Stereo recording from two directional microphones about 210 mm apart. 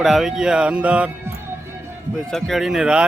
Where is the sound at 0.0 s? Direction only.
Centre (ahead or behind).